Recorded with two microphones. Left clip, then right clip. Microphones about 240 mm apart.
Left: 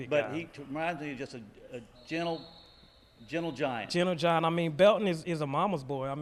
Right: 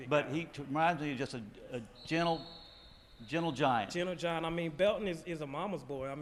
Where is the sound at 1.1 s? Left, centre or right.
Right.